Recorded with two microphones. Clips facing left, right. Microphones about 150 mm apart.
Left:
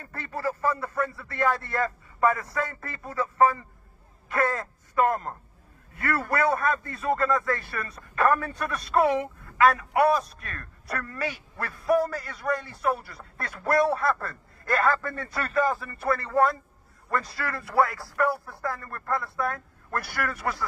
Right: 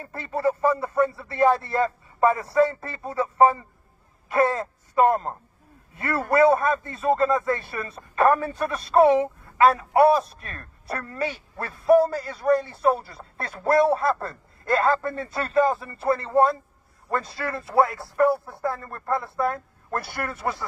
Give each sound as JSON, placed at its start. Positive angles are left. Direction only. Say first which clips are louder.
{"t": 0.0, "sound": "speech", "louder": "right 6 dB", "side_deg": -25}